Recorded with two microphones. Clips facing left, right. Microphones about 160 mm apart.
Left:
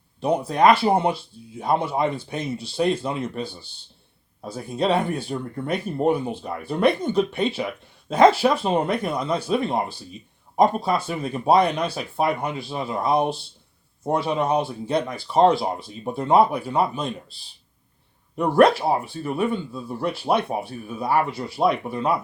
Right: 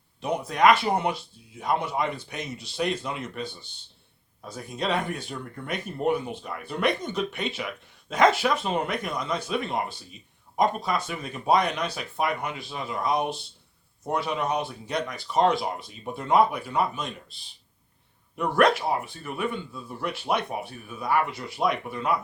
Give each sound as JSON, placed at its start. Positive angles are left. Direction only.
{"t": 0.2, "sound": "speech", "side_deg": 30}
{"t": 18.3, "sound": "speech", "side_deg": 30}